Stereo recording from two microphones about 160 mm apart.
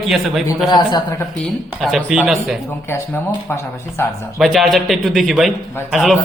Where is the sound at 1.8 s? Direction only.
Centre (ahead or behind).